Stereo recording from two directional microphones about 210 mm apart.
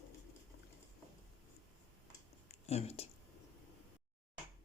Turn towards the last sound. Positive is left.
turn(degrees=30)  # may be behind; listen again after turning